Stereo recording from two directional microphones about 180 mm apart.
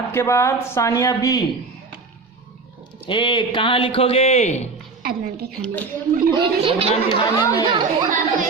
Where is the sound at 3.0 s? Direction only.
25° left (ahead or behind).